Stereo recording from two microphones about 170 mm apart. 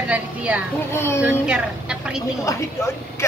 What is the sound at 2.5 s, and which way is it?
Speech, 20° left (ahead or behind).